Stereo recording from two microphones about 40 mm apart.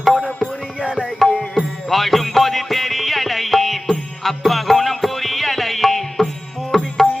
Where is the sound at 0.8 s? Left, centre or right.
Right.